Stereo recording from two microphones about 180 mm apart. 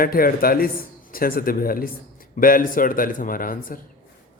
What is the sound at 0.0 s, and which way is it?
A man's voice, 55° left (ahead or behind).